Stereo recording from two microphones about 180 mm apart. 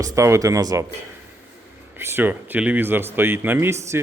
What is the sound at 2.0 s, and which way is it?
Speech, 15° right (ahead or behind).